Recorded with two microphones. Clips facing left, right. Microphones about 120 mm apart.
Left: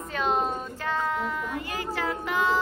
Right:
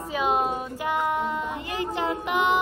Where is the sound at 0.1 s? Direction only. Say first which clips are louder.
Right 2 dB; 10° right (ahead or behind).